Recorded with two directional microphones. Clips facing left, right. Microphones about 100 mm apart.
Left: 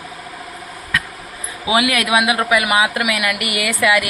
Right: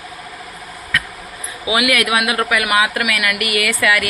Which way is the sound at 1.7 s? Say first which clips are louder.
Even; 30° left (ahead or behind).